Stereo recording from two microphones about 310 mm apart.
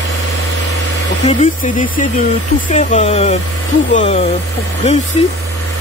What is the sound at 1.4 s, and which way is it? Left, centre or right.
Speech, left.